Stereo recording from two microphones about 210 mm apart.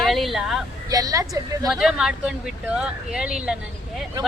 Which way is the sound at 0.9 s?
15° right (ahead or behind).